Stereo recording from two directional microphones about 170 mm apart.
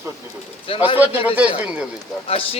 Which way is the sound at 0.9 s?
10° right (ahead or behind).